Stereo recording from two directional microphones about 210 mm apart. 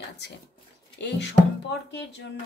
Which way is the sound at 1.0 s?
55° left (ahead or behind).